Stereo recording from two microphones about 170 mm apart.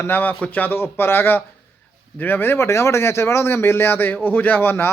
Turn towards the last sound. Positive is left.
turn(degrees=15)  # may be behind; listen again after turning